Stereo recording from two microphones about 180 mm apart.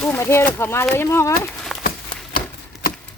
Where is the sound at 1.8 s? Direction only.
55° left (ahead or behind).